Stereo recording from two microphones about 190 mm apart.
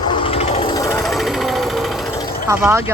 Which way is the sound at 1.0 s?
Centre (ahead or behind).